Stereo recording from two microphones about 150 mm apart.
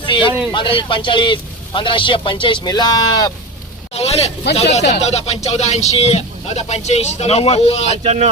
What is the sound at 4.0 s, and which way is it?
Speech, 45° left (ahead or behind).